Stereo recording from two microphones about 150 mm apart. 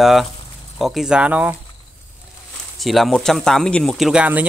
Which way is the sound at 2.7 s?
Centre (ahead or behind).